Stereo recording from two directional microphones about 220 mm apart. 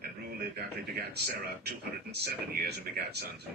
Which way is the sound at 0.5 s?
45° right (ahead or behind).